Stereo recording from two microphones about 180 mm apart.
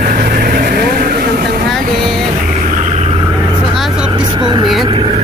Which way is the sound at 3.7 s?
Centre (ahead or behind).